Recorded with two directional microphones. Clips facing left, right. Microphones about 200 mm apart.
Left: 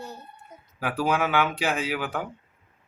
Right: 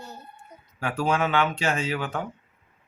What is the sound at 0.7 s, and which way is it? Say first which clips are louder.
Speech: even; 5° left (ahead or behind).